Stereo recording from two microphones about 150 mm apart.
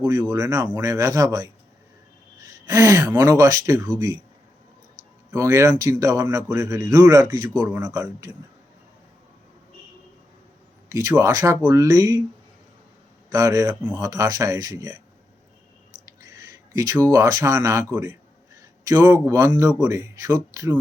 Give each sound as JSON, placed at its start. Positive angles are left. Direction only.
{"t": 0.0, "sound": "speech", "side_deg": -20}
{"t": 5.3, "sound": "speech", "side_deg": -20}
{"t": 10.9, "sound": "speech", "side_deg": -20}
{"t": 13.3, "sound": "speech", "side_deg": -20}
{"t": 16.0, "sound": "speech", "side_deg": -20}